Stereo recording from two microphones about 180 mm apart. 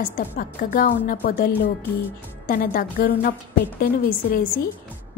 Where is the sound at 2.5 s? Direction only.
55° left (ahead or behind).